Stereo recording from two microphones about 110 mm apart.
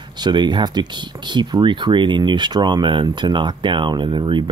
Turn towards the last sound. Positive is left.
turn(degrees=-45)  # may be behind; listen again after turning